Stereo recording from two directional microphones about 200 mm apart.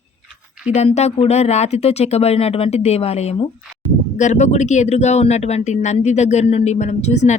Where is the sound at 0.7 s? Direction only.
35° left (ahead or behind).